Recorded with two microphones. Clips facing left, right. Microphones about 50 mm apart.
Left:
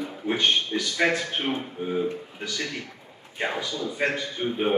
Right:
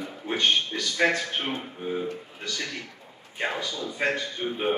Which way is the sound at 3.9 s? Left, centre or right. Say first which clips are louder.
Even; centre.